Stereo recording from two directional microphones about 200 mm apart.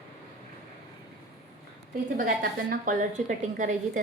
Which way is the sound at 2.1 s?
45° right (ahead or behind).